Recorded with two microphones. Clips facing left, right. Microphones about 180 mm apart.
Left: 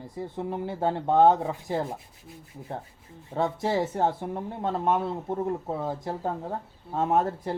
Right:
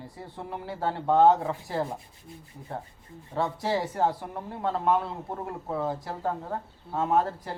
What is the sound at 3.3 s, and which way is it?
Speech, 20° left (ahead or behind).